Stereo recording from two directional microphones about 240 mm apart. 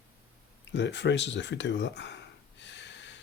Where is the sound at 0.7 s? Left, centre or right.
Left.